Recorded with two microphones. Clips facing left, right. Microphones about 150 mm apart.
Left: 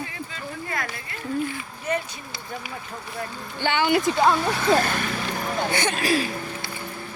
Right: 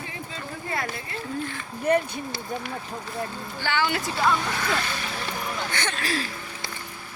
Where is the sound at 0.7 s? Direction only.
25° right (ahead or behind).